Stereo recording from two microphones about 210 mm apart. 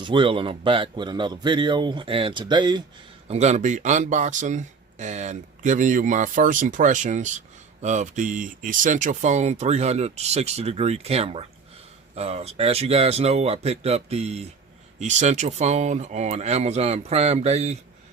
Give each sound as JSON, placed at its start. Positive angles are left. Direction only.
{"t": 0.0, "sound": "speech", "side_deg": -25}
{"t": 3.2, "sound": "speech", "side_deg": -30}